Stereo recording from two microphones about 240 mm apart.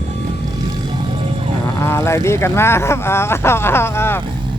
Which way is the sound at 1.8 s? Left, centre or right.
Centre.